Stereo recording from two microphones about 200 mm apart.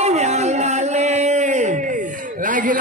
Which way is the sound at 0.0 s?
35° right (ahead or behind).